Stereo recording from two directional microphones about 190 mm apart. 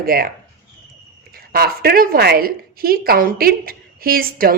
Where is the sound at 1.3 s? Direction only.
55° right (ahead or behind).